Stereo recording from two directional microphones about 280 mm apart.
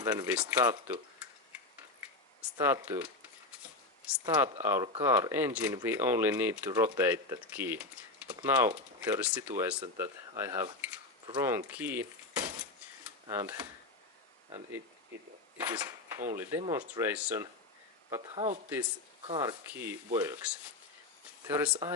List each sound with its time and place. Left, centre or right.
0.0 s speech: centre
2.6 s speech: centre
4.6 s speech: centre
15.5 s mechanisms: centre
16.6 s speech: centre
18.1 s speech: centre